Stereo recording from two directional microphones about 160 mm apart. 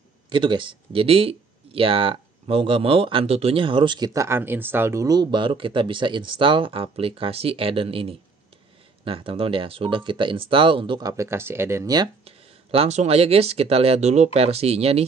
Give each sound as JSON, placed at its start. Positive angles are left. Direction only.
{"t": 0.3, "sound": "speech", "side_deg": -30}
{"t": 12.3, "sound": "speech", "side_deg": -40}